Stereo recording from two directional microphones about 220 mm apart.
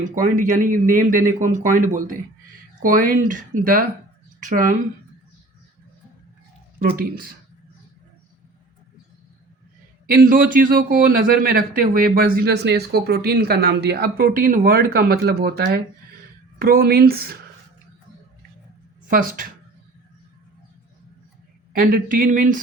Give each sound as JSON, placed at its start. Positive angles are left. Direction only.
{"t": 0.0, "sound": "a man's voice", "side_deg": -35}
{"t": 6.7, "sound": "speech", "side_deg": -40}
{"t": 10.1, "sound": "a man's voice", "side_deg": -40}
{"t": 19.0, "sound": "speech", "side_deg": -40}
{"t": 21.7, "sound": "a man's voice", "side_deg": -40}